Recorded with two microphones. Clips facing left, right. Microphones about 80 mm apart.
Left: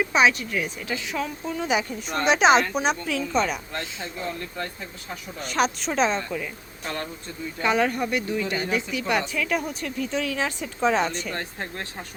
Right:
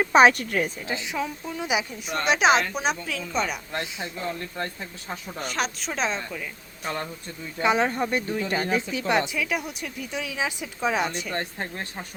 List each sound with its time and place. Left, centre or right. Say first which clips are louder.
0.0 s speech: right 4 dB; right
1.1 s a woman's voice: left 1 dB; centre
5.4 s a woman's voice: left 5 dB; centre
6.8 s speech: right 1 dB; centre
9.3 s speech: left 2 dB; centre